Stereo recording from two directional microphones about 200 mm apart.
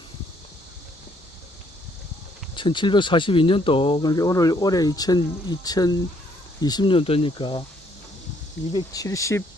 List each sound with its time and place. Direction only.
2.6 s speech: 25° left (ahead or behind)
8.7 s speech: 15° left (ahead or behind)